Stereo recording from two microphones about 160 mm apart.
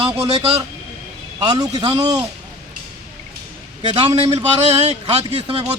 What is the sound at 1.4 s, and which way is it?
Speech, 25° right (ahead or behind).